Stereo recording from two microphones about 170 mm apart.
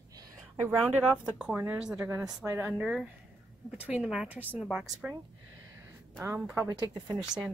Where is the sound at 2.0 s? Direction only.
20° right (ahead or behind); by 4.8 s centre (ahead or behind).